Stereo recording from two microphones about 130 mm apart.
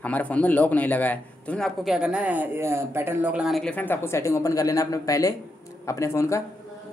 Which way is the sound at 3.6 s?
10° left (ahead or behind).